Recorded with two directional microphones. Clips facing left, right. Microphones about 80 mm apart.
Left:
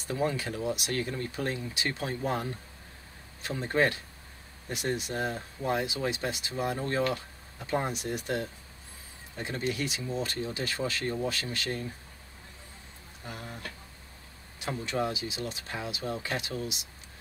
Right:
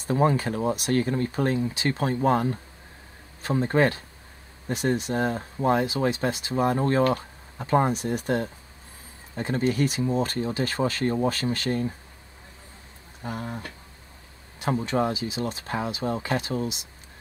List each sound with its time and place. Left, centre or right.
0.0 s speech: right
3.4 s speech: right
13.2 s speech: right